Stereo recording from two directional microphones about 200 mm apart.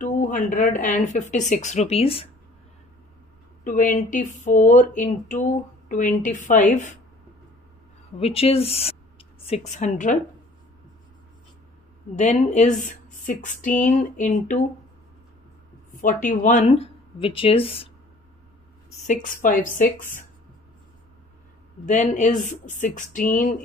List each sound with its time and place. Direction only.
0.0 s a sound: 40° left (ahead or behind)
0.9 s speech: 35° left (ahead or behind)
3.6 s speech: 40° left (ahead or behind)
8.2 s speech: 30° left (ahead or behind)
12.2 s speech: 35° left (ahead or behind)
15.9 s speech: 40° left (ahead or behind)
19.0 s speech: 40° left (ahead or behind)
21.8 s speech: 35° left (ahead or behind)